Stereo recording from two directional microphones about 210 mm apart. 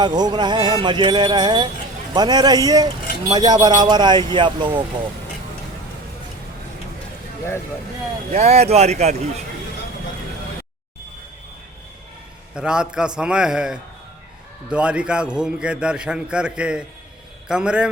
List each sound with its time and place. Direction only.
0.0 s speech: 20° right (ahead or behind)
8.3 s speech: 30° right (ahead or behind)
12.5 s a man's voice: 5° right (ahead or behind)